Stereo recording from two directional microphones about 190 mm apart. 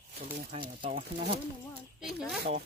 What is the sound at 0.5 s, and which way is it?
Speech, 25° right (ahead or behind).